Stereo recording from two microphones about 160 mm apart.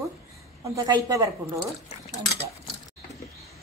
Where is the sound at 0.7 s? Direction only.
25° right (ahead or behind).